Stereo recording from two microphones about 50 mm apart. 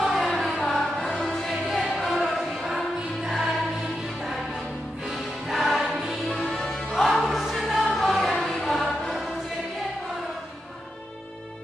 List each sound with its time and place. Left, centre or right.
0.0 s music: centre
5.0 s music: centre
6.4 s music: centre
7.0 s music: centre